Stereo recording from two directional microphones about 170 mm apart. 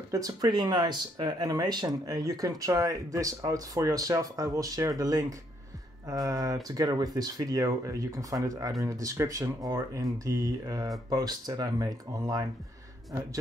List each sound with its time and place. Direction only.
0.1 s speech: 20° right (ahead or behind)